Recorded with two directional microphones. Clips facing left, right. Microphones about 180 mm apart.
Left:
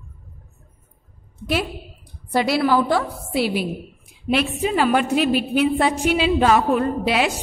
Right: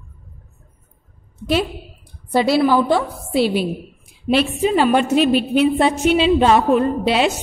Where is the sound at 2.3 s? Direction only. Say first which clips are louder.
Right 3 dB; 25° right (ahead or behind).